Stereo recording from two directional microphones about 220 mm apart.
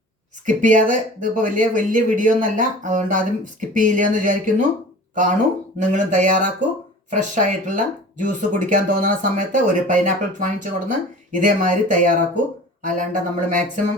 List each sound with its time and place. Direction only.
0.4 s speech: 35° right (ahead or behind)
5.9 s speech: 35° right (ahead or behind)